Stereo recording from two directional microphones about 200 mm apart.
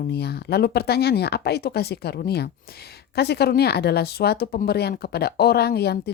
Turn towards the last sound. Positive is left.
turn(degrees=55)  # may be behind; listen again after turning